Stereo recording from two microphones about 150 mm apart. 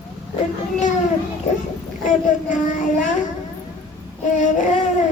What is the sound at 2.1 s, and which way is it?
Child singing, 60° left (ahead or behind).